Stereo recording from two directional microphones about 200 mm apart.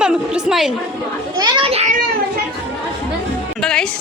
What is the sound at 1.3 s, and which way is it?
Speech, 20° right (ahead or behind).